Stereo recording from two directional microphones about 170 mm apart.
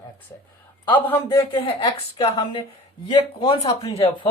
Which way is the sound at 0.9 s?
15° left (ahead or behind).